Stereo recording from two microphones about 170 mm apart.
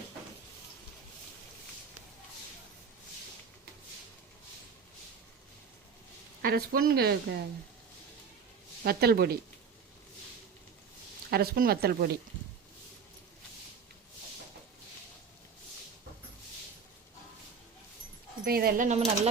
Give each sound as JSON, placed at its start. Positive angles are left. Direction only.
{"t": 6.4, "sound": "a woman's voice", "side_deg": -60}
{"t": 8.8, "sound": "speech", "side_deg": -65}
{"t": 11.3, "sound": "a woman's voice", "side_deg": -65}
{"t": 18.4, "sound": "speech", "side_deg": -60}
{"t": 18.9, "sound": "speech", "side_deg": -40}